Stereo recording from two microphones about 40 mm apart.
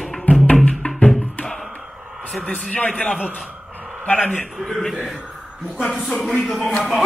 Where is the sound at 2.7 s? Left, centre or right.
Left.